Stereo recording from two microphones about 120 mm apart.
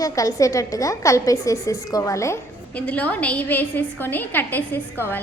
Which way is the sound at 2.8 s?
10° left (ahead or behind).